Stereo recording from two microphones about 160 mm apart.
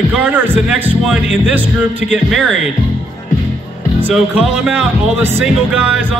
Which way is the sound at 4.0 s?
5° right (ahead or behind).